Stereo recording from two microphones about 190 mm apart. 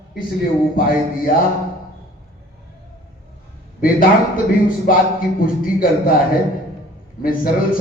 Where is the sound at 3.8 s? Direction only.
50° left (ahead or behind).